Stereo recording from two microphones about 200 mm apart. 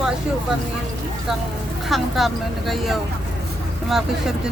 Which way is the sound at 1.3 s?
Centre (ahead or behind).